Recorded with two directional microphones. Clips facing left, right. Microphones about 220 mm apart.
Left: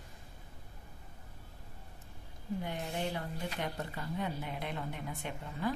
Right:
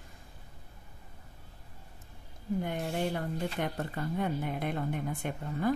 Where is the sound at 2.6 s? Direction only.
50° right (ahead or behind).